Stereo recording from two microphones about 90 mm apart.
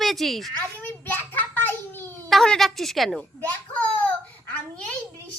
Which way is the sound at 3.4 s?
20° left (ahead or behind).